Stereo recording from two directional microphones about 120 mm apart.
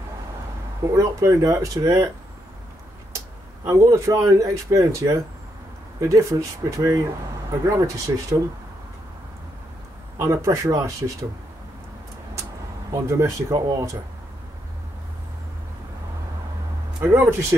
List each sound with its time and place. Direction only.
0.8 s speech: 25° right (ahead or behind)
3.6 s speech: 25° right (ahead or behind)
10.1 s speech: 25° right (ahead or behind)
12.9 s speech: 30° right (ahead or behind)
17.0 s speech: 20° right (ahead or behind)